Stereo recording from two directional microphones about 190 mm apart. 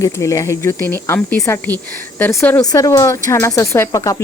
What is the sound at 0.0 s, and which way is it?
Speech, 15° left (ahead or behind).